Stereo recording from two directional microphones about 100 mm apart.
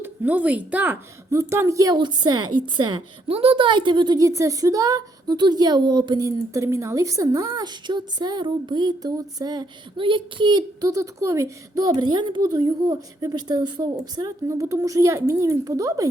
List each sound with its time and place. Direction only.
0.0 s a woman's voice: 20° right (ahead or behind)
1.3 s a woman's voice: 30° right (ahead or behind)
2.0 s a woman's voice: 50° right (ahead or behind)
3.2 s a woman's voice: 75° right (ahead or behind); by 4.3 s 45° right (ahead or behind)
4.3 s a woman's voice: 35° right (ahead or behind); by 10.8 s 50° right (ahead or behind)
10.8 s a woman's voice: 35° right (ahead or behind)